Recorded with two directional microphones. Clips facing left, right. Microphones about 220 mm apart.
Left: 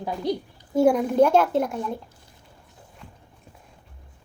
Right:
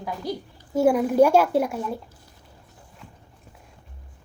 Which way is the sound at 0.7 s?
5° right (ahead or behind).